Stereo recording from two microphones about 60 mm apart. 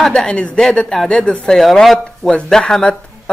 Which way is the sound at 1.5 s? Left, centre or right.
Centre.